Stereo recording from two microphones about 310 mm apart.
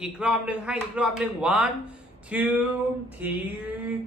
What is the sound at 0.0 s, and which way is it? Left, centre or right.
A man's voice, centre.